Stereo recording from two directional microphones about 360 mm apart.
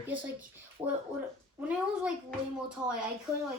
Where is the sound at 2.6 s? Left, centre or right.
Centre.